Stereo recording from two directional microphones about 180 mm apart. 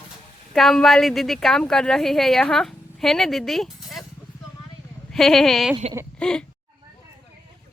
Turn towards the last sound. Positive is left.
turn(degrees=5)  # may be behind; listen again after turning